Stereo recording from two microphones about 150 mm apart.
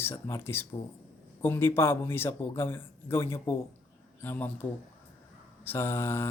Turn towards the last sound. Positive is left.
turn(degrees=15)  # may be behind; listen again after turning